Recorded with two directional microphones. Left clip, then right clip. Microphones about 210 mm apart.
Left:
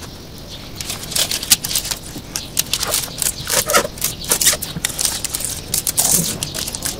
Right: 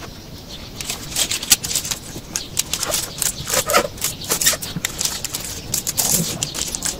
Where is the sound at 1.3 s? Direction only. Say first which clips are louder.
Right 2 dB; centre (ahead or behind).